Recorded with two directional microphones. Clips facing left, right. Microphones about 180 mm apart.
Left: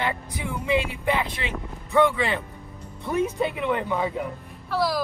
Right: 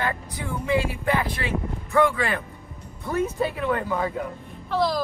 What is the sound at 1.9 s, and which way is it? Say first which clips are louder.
Speech: left 1 dB; 20° left (ahead or behind).